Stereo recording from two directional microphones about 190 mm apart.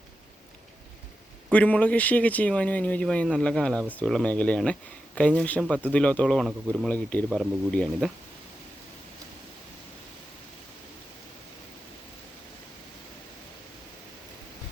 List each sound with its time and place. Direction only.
1.5 s speech: 5° left (ahead or behind)